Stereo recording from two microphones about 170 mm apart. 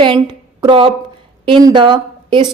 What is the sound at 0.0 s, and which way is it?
A woman's voice, 25° right (ahead or behind).